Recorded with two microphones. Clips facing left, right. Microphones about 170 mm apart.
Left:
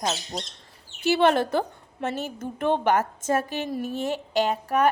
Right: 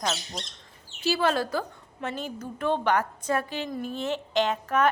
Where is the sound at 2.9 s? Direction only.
45° left (ahead or behind).